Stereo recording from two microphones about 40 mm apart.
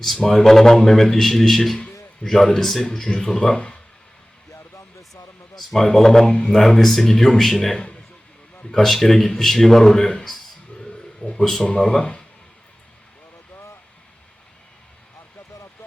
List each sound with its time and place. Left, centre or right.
0.0 s a man's voice: centre
5.7 s a man's voice: centre
10.8 s a sound: left
11.6 s speech: left